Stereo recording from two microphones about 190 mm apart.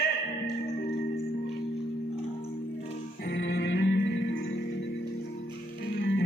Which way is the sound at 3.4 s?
70° left (ahead or behind).